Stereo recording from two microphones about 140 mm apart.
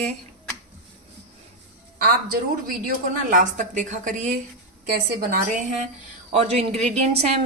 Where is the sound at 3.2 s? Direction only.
65° right (ahead or behind).